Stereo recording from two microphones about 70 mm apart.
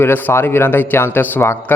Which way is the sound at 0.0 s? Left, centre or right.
Left.